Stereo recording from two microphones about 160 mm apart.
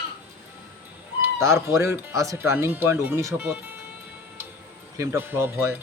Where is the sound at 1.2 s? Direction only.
15° right (ahead or behind).